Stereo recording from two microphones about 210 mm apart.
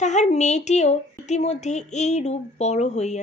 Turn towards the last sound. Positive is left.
turn(degrees=35)  # may be behind; listen again after turning